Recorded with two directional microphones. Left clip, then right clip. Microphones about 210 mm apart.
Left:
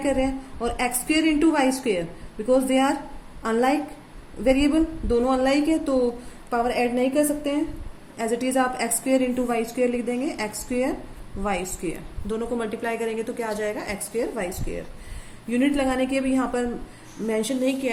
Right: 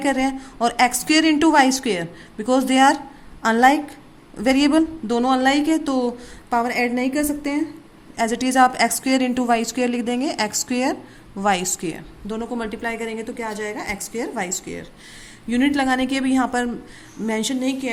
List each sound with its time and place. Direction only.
0.0 s a woman's voice: 40° right (ahead or behind)
12.3 s a woman's voice: 25° right (ahead or behind)